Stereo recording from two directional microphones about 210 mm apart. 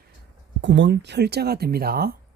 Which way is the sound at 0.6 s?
55° right (ahead or behind).